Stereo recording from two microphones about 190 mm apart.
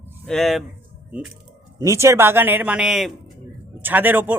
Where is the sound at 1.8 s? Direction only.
15° right (ahead or behind).